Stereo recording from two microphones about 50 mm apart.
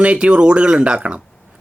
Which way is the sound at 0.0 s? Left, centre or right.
Right.